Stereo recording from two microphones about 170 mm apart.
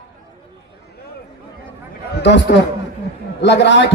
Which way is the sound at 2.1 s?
90° left.